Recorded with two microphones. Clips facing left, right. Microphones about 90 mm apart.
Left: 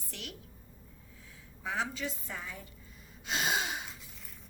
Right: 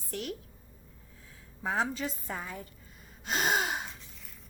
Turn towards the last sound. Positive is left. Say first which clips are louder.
# right 4 dB
turn(degrees=-45)  # may be behind; listen again after turning